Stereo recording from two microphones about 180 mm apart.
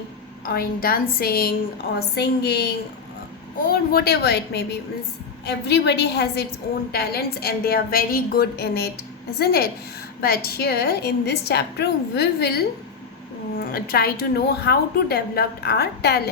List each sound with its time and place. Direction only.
0.4 s a woman's voice: 55° left (ahead or behind)
13.6 s a woman's voice: 55° left (ahead or behind)